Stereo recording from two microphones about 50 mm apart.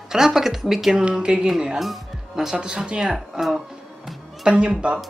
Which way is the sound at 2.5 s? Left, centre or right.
Centre.